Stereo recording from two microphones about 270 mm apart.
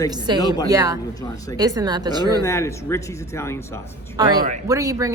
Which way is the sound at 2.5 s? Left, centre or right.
Centre.